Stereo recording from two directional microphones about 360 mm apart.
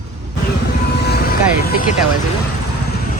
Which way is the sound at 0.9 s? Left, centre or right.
Left.